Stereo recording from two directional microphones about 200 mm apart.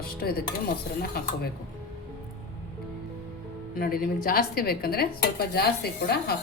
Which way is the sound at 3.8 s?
50° left (ahead or behind).